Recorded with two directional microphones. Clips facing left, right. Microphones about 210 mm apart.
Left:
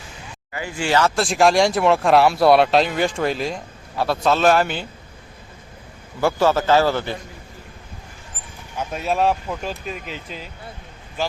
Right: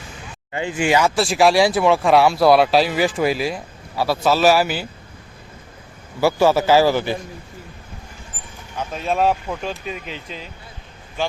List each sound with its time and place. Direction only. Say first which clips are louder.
0.5 s a man's voice: right 2 dB; 20° right (ahead or behind); by 4.9 s 5° right (ahead or behind)
6.1 s a man's voice: right 2 dB; 10° right (ahead or behind)
8.8 s speech: right 1 dB; 10° left (ahead or behind)